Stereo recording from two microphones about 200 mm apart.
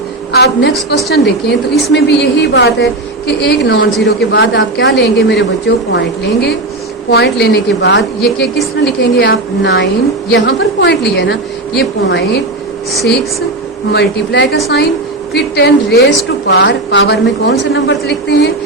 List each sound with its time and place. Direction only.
0.3 s a woman's voice: 55° left (ahead or behind)
4.9 s a woman's voice: 60° left (ahead or behind)
13.9 s a woman's voice: 60° left (ahead or behind)